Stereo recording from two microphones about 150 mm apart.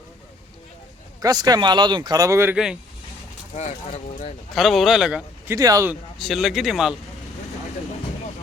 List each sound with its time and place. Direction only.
1.2 s speech: 25° right (ahead or behind)
3.5 s speech: 45° left (ahead or behind)
4.5 s speech: centre (ahead or behind)
5.5 s speech: 20° right (ahead or behind)
6.1 s speech: centre (ahead or behind)